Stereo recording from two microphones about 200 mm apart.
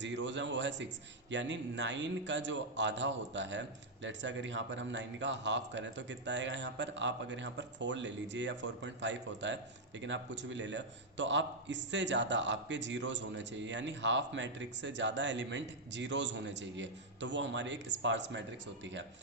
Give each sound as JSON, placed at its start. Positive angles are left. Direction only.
{"t": 0.0, "sound": "a man's voice", "side_deg": -65}